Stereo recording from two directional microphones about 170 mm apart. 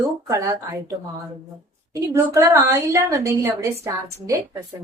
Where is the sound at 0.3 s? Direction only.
15° right (ahead or behind).